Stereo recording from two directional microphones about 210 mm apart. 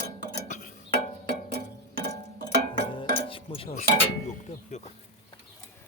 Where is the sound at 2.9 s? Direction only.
25° left (ahead or behind).